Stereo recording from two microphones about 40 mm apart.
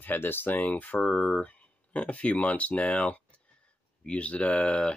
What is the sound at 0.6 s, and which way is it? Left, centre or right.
Speech, left.